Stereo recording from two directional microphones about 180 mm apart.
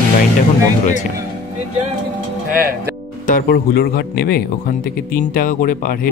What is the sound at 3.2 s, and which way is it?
Speech, 55° left (ahead or behind).